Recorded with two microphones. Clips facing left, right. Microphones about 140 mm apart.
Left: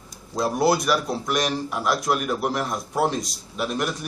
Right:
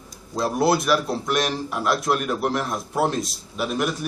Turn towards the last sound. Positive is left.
turn(degrees=0)  # may be behind; listen again after turning